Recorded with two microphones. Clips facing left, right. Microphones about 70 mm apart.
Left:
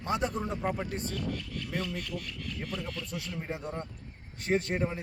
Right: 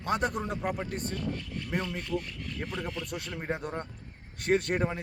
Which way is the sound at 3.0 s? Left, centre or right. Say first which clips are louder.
Right 3 dB; right.